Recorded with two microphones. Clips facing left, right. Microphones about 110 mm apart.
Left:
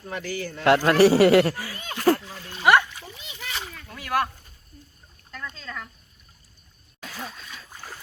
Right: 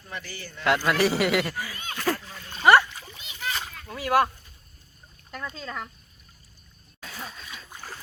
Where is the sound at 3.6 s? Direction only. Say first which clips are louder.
Right 5 dB; 5° right (ahead or behind).